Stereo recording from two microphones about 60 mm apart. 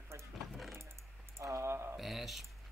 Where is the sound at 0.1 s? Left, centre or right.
Right.